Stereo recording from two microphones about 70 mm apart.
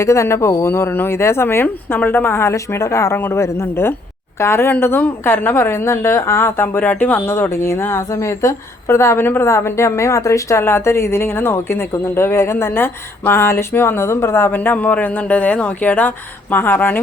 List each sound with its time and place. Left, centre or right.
0.0 s a woman's voice: left
7.3 s a woman's voice: left